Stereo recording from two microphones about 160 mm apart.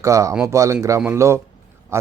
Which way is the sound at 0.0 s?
20° right (ahead or behind).